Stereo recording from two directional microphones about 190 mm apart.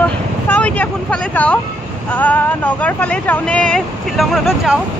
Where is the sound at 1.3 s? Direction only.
5° left (ahead or behind).